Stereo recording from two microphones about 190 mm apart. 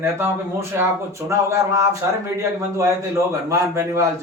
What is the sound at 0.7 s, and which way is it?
A man's voice, 15° right (ahead or behind).